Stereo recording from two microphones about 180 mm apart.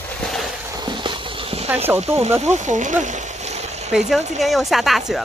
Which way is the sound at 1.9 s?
35° right (ahead or behind).